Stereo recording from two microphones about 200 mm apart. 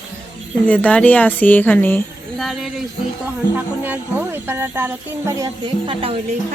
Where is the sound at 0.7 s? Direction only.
5° left (ahead or behind).